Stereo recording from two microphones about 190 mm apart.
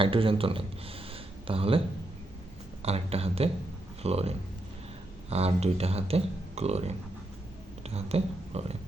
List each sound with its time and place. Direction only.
0.0 s speech: 30° right (ahead or behind)
2.8 s speech: 30° right (ahead or behind)